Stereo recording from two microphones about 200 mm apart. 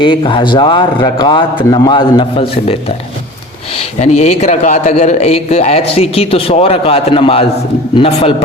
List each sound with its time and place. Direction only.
0.0 s a man's voice: 25° left (ahead or behind)
4.0 s a man's voice: 35° left (ahead or behind)